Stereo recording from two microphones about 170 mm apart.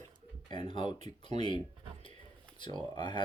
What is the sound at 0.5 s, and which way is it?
Speech, 30° left (ahead or behind).